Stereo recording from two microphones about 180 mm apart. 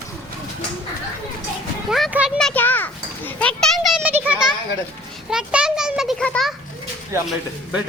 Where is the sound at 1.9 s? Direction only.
Centre (ahead or behind).